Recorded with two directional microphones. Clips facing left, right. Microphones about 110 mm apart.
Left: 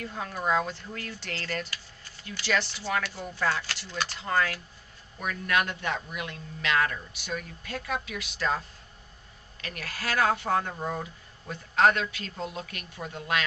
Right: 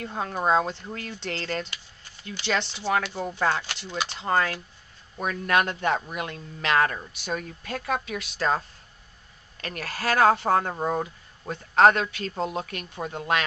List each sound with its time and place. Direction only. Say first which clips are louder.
0.0 s speech: right 5 dB; 30° right (ahead or behind)
7.7 s speech: right 4 dB; 50° right (ahead or behind)
8.0 s speech: right 4 dB; 40° right (ahead or behind)
12.7 s speech: right 6 dB; 30° right (ahead or behind)